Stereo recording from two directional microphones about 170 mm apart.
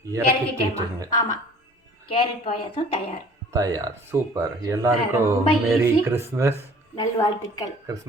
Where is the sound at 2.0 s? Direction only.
30° left (ahead or behind).